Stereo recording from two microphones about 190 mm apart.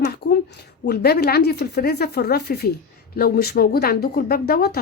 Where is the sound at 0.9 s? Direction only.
55° left (ahead or behind).